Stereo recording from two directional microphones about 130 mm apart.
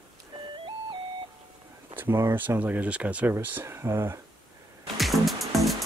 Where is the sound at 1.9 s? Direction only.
15° right (ahead or behind).